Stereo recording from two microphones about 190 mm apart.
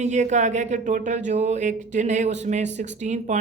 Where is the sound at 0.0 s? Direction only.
40° right (ahead or behind).